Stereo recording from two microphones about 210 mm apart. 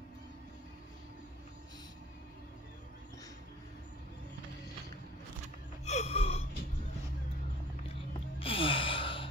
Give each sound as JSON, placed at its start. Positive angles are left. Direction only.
{"t": 5.9, "sound": "gasp", "side_deg": 30}
{"t": 8.4, "sound": "gasp", "side_deg": 25}